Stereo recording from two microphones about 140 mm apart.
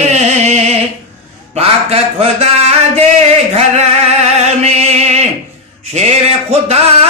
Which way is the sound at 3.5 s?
50° right (ahead or behind).